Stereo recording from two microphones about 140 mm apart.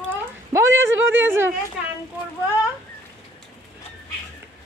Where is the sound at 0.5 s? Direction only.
20° right (ahead or behind).